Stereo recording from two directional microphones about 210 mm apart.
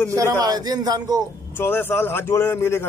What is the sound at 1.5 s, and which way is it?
A man's voice, 10° left (ahead or behind).